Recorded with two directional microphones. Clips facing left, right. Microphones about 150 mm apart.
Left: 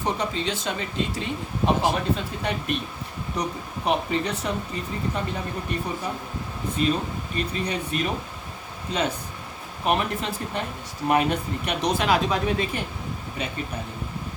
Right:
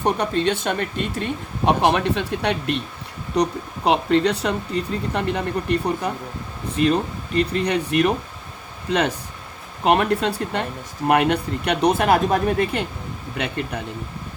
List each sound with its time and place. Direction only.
0.0 s speech: 60° right (ahead or behind)
7.3 s speech: 70° right (ahead or behind)
9.8 s speech: 70° right (ahead or behind)
13.3 s speech: 70° right (ahead or behind)